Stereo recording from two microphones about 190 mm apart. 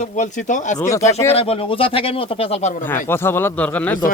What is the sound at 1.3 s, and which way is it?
Speech, 30° left (ahead or behind).